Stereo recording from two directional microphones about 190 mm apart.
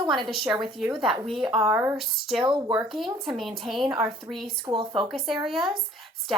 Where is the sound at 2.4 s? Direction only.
25° right (ahead or behind).